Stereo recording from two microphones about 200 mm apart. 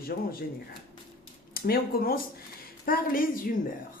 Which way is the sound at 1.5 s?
45° left (ahead or behind).